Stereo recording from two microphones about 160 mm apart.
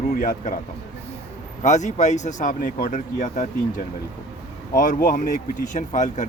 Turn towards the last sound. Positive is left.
turn(degrees=50)  # may be behind; listen again after turning